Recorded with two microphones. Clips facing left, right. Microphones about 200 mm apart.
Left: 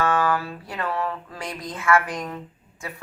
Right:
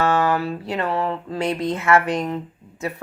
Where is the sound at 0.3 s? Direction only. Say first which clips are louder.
Right 4 dB; 25° right (ahead or behind).